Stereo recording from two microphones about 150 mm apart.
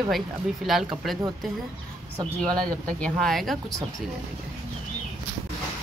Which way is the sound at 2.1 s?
25° right (ahead or behind).